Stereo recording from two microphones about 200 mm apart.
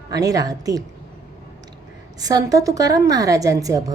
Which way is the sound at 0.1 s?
15° right (ahead or behind).